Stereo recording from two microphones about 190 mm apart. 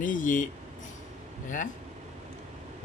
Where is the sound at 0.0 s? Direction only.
45° left (ahead or behind).